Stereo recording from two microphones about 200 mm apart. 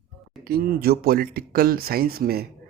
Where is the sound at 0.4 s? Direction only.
50° right (ahead or behind).